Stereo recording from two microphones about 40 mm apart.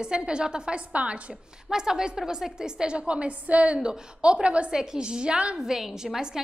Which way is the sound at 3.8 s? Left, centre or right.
Right.